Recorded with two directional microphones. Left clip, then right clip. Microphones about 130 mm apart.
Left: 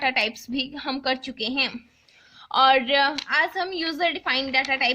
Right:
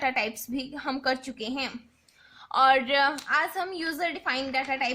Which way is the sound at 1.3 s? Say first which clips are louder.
Left 7 dB; 10° left (ahead or behind).